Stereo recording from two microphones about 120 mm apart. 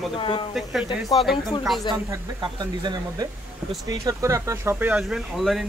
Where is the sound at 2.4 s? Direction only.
40° right (ahead or behind).